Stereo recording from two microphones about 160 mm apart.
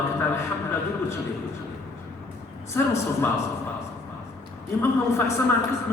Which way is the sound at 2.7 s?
15° left (ahead or behind).